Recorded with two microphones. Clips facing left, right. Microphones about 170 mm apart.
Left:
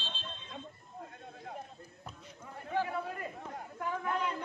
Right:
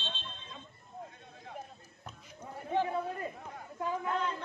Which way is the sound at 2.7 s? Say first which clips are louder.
Right 2 dB; 20° right (ahead or behind).